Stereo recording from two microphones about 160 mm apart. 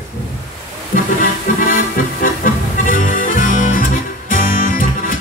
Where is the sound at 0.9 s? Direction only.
60° left (ahead or behind).